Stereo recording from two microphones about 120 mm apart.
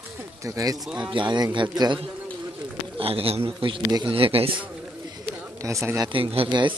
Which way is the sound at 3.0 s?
50° right (ahead or behind).